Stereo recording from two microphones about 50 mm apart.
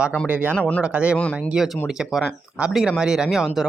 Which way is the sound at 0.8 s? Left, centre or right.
Right.